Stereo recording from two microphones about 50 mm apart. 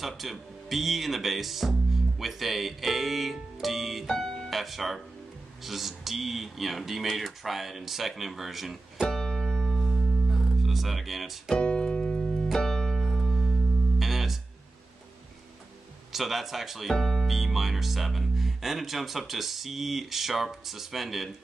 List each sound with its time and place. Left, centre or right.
0.0 s speech: centre
4.2 s music: centre
4.5 s speech: centre
9.0 s keyboard: centre
9.9 s music: centre
11.6 s keyboard: centre
12.5 s music: centre
16.1 s speech: centre
16.9 s speech: centre
17.4 s speech: centre